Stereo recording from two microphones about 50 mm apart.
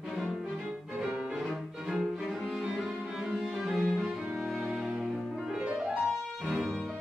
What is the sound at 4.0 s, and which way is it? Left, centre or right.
Music, centre.